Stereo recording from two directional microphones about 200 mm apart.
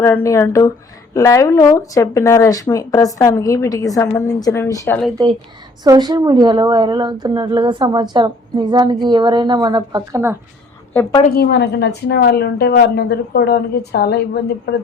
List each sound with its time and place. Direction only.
0.0 s speech: 15° left (ahead or behind)
5.8 s a woman's voice: 20° right (ahead or behind)
11.3 s a woman's voice: 55° left (ahead or behind)